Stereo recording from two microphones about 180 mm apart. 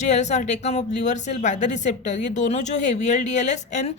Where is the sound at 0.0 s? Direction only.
40° left (ahead or behind).